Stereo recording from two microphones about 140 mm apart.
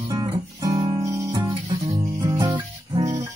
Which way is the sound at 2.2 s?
30° right (ahead or behind).